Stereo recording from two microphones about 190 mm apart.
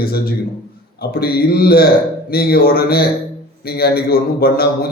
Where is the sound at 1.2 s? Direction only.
55° left (ahead or behind).